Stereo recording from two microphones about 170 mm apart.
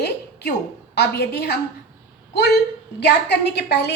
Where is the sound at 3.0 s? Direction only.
80° left.